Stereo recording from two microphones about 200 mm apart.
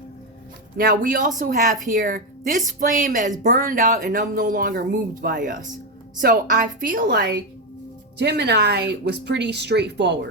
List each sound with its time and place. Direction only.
0.8 s speech: 45° right (ahead or behind)
8.2 s speech: 55° right (ahead or behind)